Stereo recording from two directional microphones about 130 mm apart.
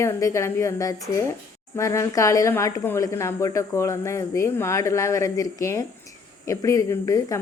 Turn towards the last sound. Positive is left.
turn(degrees=25)  # may be behind; listen again after turning